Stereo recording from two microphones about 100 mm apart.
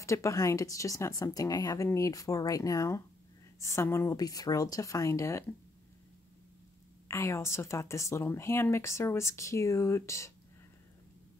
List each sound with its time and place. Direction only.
0.0 s speech: 30° left (ahead or behind)
7.1 s speech: 30° left (ahead or behind)